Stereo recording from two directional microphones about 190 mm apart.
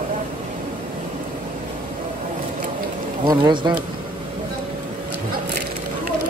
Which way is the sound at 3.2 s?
25° right (ahead or behind).